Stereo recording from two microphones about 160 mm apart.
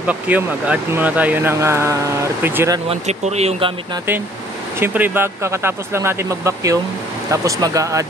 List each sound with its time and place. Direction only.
0.0 s speech: 10° right (ahead or behind)
2.9 s speech: 40° right (ahead or behind)
4.7 s speech: 15° right (ahead or behind)